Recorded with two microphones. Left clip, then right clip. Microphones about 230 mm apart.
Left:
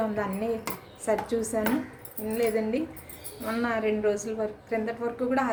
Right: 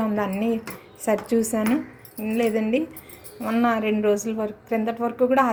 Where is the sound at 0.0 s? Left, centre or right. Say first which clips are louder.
Right 4 dB; right.